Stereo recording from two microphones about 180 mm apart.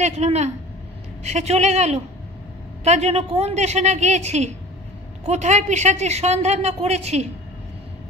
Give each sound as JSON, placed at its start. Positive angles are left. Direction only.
{"t": 0.0, "sound": "speech", "side_deg": -40}